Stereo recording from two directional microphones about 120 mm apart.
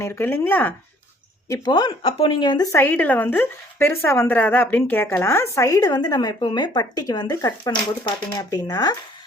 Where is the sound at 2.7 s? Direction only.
15° left (ahead or behind); by 9.0 s 35° left (ahead or behind).